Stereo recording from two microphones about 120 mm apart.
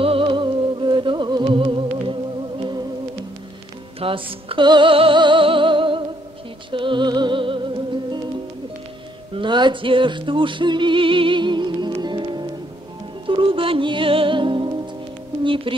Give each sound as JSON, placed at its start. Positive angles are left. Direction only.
{"t": 0.0, "sound": "music", "side_deg": -50}
{"t": 4.0, "sound": "music", "side_deg": -50}
{"t": 9.3, "sound": "music", "side_deg": -40}